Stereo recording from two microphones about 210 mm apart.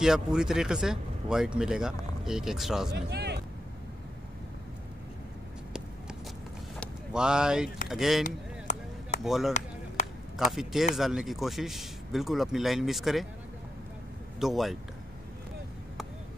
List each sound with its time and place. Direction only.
0.0 s speech: 5° right (ahead or behind)
2.9 s speech: 50° right (ahead or behind)
6.8 s a sound: 5° right (ahead or behind)
7.9 s speech: centre (ahead or behind)
8.7 s chop: 35° left (ahead or behind)
9.2 s speech: centre (ahead or behind)
10.0 s a sound: 35° left (ahead or behind)
10.3 s speech: centre (ahead or behind)
14.4 s speech: centre (ahead or behind)